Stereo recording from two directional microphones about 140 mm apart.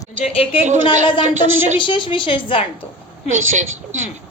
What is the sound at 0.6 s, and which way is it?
Speech, 60° right (ahead or behind).